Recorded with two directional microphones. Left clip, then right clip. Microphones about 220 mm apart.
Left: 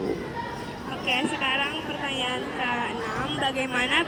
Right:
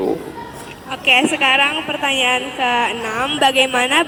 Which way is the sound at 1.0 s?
55° right (ahead or behind).